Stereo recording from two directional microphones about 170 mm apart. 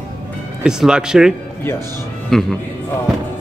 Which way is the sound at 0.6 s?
5° right (ahead or behind).